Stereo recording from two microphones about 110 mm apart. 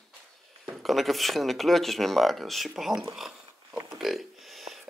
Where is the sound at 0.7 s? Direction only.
Centre (ahead or behind).